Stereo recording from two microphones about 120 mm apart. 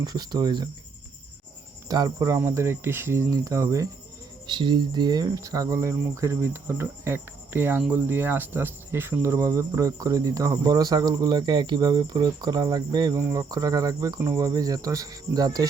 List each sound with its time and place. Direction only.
0.0 s speech: 35° right (ahead or behind)
1.9 s speech: 30° right (ahead or behind)
4.4 s speech: 40° right (ahead or behind)